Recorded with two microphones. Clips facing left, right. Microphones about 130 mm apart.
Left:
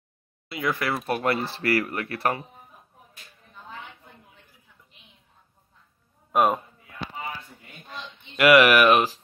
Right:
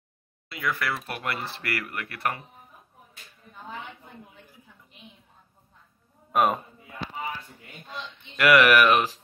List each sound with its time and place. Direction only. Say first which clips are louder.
0.5 s speech: left 3 dB; 20° left (ahead or behind)
0.8 s speech: left 6 dB; 35° left (ahead or behind)
6.3 s speech: left 2 dB; 10° left (ahead or behind)
8.4 s speech: left 2 dB; 15° left (ahead or behind)